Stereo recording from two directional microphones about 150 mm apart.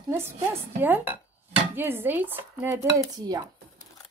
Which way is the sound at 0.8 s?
15° right (ahead or behind).